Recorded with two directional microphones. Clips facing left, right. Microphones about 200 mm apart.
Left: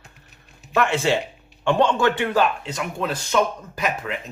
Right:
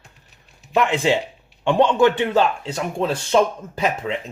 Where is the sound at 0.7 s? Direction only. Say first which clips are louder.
Right 2 dB; 15° right (ahead or behind).